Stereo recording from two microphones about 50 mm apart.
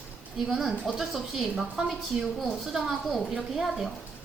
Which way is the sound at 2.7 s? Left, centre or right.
Centre.